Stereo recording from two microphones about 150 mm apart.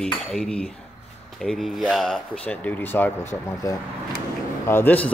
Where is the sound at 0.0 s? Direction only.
5° left (ahead or behind).